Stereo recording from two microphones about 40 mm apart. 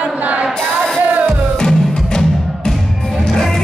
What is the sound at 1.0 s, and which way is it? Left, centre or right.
Music, right.